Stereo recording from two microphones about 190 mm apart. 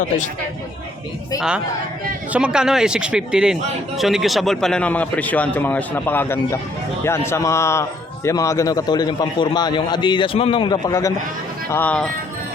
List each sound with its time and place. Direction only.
1.4 s a man's voice: 5° right (ahead or behind); by 11.1 s 20° left (ahead or behind)
11.7 s speech: 10° left (ahead or behind)